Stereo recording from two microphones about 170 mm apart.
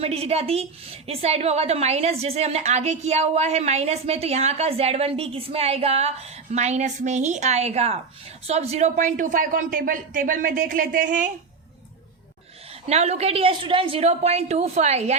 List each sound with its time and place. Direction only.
0.0 s a woman's voice: 35° right (ahead or behind)
12.9 s a woman's voice: 40° right (ahead or behind)